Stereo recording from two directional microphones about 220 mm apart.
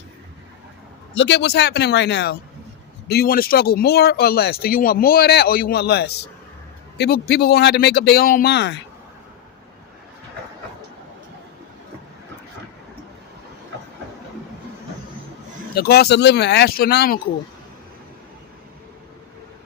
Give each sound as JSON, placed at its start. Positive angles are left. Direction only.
{"t": 1.1, "sound": "speech", "side_deg": 55}
{"t": 15.7, "sound": "speech", "side_deg": 45}